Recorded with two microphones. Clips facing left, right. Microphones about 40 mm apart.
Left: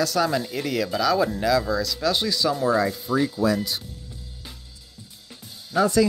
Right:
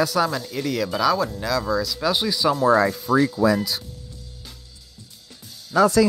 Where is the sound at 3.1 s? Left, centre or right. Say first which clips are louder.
Right 5 dB; right.